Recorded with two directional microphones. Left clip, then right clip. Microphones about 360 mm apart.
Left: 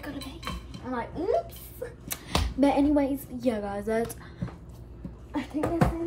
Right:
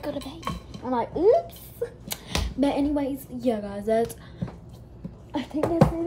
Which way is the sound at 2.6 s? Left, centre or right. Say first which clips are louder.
Left 2 dB; centre.